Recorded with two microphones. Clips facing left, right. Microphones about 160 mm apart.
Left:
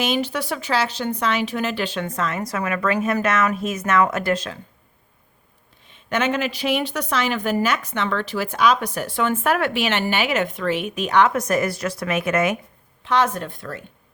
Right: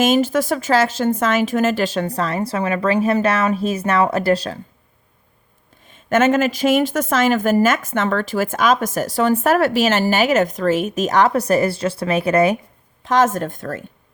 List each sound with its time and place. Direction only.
0.0 s a woman's voice: 45° right (ahead or behind)
5.9 s a woman's voice: 45° right (ahead or behind)
13.1 s speech: 45° right (ahead or behind)